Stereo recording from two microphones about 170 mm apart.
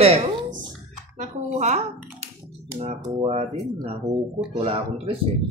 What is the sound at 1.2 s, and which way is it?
Speech, 45° right (ahead or behind).